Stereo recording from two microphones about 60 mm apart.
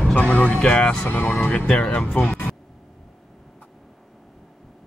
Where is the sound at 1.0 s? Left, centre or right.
Left.